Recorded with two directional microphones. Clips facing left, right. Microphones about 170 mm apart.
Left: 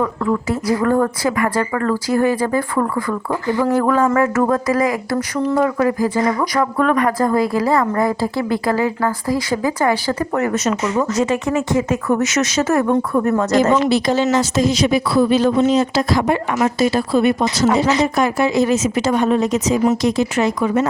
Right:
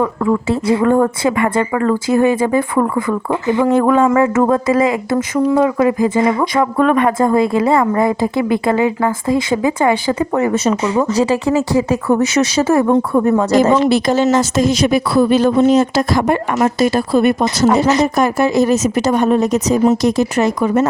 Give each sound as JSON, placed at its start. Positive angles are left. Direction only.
{"t": 0.0, "sound": "speech", "side_deg": -25}
{"t": 10.5, "sound": "speech", "side_deg": -30}
{"t": 13.8, "sound": "speech", "side_deg": -50}